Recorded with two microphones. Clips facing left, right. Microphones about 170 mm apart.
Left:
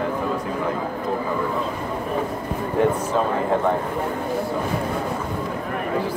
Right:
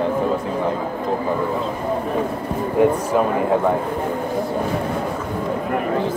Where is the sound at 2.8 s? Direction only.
15° right (ahead or behind).